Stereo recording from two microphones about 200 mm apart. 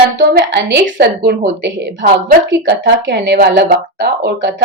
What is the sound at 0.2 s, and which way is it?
A woman's voice, 55° right (ahead or behind).